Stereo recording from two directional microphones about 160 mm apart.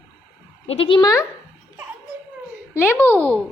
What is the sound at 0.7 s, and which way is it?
Speech, 35° left (ahead or behind).